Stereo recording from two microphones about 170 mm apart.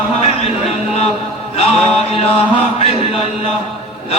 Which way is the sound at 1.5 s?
35° left (ahead or behind).